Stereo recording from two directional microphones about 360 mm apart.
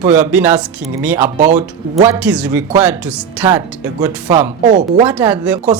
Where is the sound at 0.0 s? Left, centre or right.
Centre.